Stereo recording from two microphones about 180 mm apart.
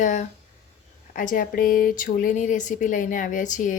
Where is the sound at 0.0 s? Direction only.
45° left (ahead or behind).